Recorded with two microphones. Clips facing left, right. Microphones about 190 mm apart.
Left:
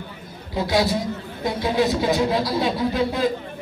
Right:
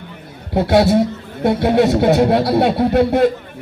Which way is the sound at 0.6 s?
65° right (ahead or behind).